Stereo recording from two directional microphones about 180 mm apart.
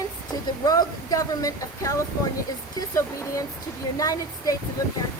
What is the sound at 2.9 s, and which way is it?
Speech, 15° left (ahead or behind).